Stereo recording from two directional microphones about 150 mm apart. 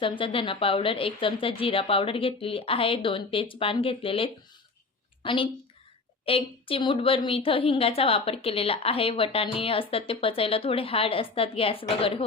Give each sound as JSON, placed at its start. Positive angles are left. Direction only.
{"t": 0.0, "sound": "a woman's voice", "side_deg": 35}